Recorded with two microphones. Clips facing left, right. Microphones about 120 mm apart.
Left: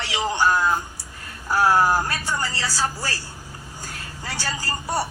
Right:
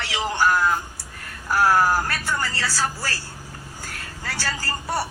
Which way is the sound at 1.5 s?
15° left (ahead or behind).